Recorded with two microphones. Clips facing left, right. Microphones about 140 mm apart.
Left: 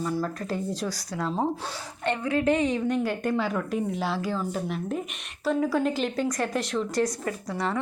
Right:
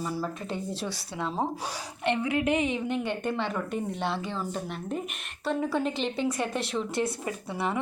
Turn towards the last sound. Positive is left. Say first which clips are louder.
# left 2 dB
turn(degrees=-10)  # may be behind; listen again after turning